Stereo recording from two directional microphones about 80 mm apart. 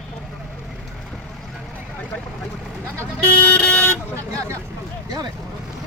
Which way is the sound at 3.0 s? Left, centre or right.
Centre.